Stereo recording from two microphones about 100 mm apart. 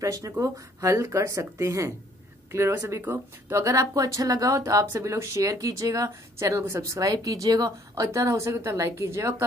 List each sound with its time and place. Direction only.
0.0 s speech: 35° right (ahead or behind)